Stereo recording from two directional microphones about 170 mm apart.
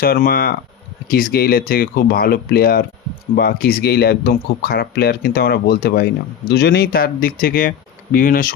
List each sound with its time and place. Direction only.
0.0 s speech: 60° left (ahead or behind)